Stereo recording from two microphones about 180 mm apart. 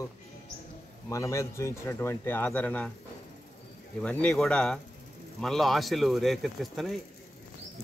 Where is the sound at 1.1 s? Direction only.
15° left (ahead or behind).